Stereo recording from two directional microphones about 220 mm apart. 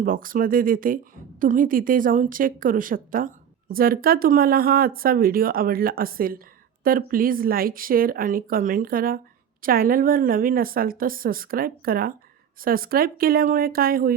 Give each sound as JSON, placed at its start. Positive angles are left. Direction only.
{"t": 0.0, "sound": "a woman's voice", "side_deg": -40}